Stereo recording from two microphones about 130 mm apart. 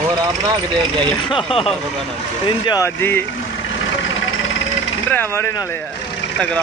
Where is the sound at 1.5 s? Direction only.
45° left (ahead or behind).